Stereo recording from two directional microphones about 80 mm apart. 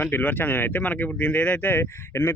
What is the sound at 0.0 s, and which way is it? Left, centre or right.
Speech, left.